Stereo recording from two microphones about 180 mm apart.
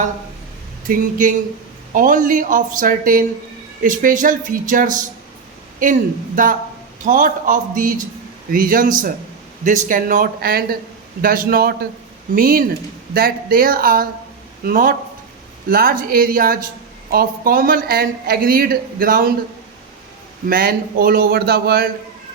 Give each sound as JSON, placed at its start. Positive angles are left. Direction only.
{"t": 0.9, "sound": "a man's voice", "side_deg": -45}
{"t": 20.5, "sound": "a man's voice", "side_deg": -55}